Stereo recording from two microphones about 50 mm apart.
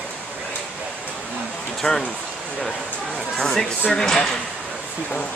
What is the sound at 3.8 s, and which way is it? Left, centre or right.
Speech, centre.